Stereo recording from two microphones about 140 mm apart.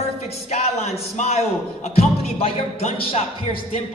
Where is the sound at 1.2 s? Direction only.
50° left (ahead or behind).